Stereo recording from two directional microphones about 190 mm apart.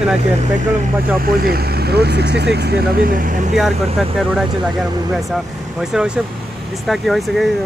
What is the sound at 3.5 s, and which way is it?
Speech, centre (ahead or behind).